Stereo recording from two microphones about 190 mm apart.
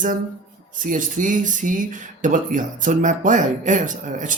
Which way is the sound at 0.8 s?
45° right (ahead or behind).